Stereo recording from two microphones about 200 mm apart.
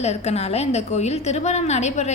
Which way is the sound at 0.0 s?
35° left (ahead or behind).